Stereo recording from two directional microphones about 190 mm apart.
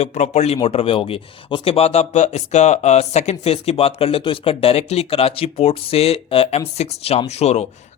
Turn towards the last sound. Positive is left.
turn(degrees=35)  # may be behind; listen again after turning